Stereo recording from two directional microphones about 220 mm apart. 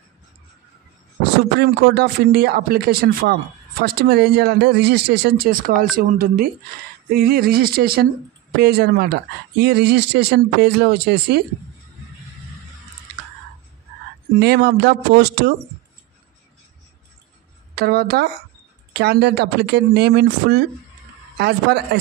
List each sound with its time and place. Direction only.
1.6 s speech: 45° right (ahead or behind)
14.4 s speech: 45° right (ahead or behind)
17.7 s speech: 45° right (ahead or behind)